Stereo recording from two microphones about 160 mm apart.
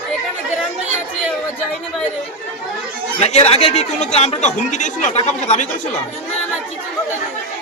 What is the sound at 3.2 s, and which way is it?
Speech, 40° left (ahead or behind).